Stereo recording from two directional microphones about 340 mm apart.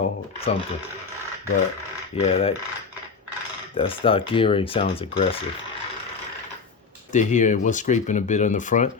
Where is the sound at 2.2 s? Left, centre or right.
Centre.